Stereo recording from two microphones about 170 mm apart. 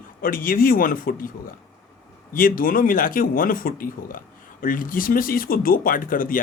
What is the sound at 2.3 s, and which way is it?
Speech, 55° left (ahead or behind).